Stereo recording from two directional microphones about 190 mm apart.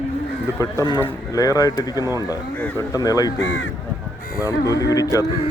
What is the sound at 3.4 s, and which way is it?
Speech, 70° left (ahead or behind).